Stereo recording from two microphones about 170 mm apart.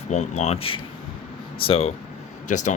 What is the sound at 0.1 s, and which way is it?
Speech, 40° left (ahead or behind).